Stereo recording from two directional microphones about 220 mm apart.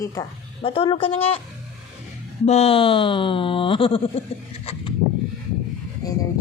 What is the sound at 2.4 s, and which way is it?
Speech, 30° left (ahead or behind).